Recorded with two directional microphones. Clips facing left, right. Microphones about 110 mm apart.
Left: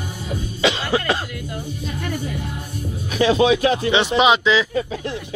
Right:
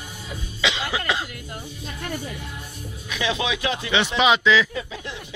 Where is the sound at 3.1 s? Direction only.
45° left (ahead or behind).